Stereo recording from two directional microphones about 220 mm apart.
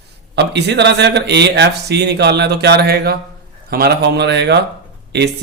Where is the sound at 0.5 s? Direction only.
50° right (ahead or behind).